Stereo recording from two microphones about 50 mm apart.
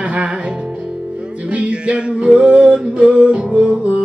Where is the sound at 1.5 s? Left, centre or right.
Right.